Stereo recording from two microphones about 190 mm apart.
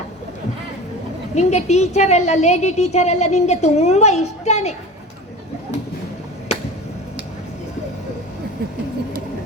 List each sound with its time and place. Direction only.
1.4 s a woman's voice: 35° left (ahead or behind)